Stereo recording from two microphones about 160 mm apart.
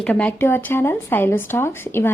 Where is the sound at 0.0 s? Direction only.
10° left (ahead or behind).